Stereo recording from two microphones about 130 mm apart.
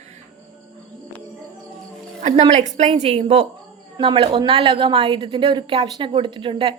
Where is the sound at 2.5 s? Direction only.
65° right (ahead or behind).